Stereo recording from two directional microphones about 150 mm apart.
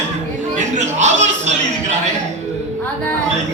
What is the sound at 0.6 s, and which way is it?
Speech, 50° right (ahead or behind).